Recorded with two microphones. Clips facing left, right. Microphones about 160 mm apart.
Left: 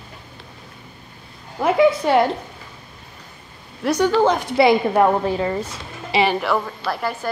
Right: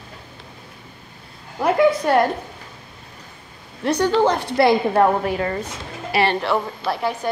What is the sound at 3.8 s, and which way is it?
A woman's voice, 5° left (ahead or behind).